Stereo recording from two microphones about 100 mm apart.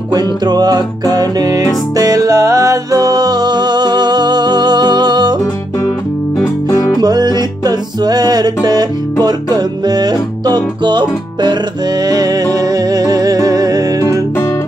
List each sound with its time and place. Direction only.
0.1 s music: 45° right (ahead or behind)
6.4 s music: 35° left (ahead or behind)
7.0 s music: 40° right (ahead or behind)
12.0 s music: 40° right (ahead or behind)